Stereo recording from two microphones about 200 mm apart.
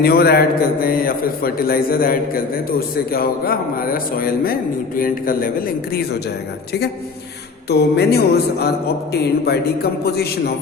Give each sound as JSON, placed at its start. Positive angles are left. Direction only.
{"t": 0.0, "sound": "a man's voice", "side_deg": 50}
{"t": 7.7, "sound": "a sound", "side_deg": 55}
{"t": 9.5, "sound": "a man's voice", "side_deg": 50}